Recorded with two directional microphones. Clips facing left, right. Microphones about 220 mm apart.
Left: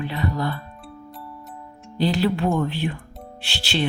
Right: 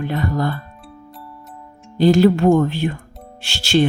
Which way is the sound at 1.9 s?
45° right (ahead or behind).